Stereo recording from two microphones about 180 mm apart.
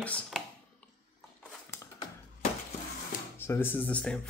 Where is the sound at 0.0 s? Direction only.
5° left (ahead or behind).